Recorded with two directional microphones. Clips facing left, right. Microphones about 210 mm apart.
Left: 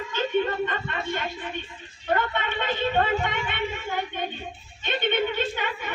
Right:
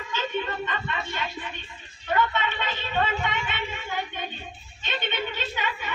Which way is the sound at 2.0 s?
50° left (ahead or behind).